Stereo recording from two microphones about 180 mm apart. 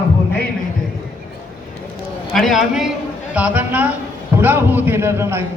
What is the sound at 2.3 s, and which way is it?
A man's voice, centre (ahead or behind).